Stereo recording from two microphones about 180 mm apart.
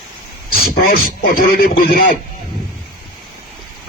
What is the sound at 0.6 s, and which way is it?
Speech, 55° left (ahead or behind).